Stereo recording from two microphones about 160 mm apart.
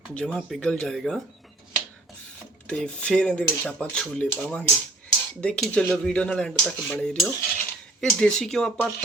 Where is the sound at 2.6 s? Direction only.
5° left (ahead or behind).